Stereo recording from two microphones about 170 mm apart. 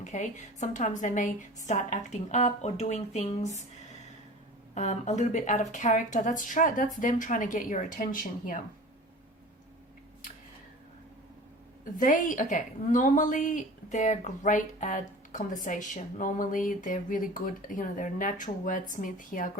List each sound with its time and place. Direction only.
0.0 s a woman's voice: 45° left (ahead or behind)
4.7 s a woman's voice: 40° left (ahead or behind)
11.9 s a woman's voice: 50° left (ahead or behind)